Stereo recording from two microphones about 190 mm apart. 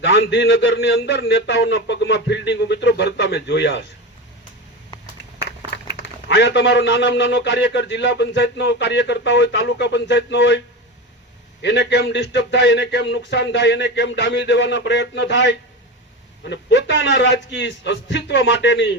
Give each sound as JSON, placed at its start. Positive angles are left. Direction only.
{"t": 0.0, "sound": "a man's voice", "side_deg": 70}
{"t": 5.4, "sound": "a man's voice", "side_deg": 55}
{"t": 11.6, "sound": "a man's voice", "side_deg": 65}